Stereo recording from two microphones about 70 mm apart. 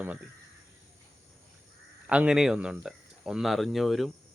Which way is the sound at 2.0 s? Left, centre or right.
Centre.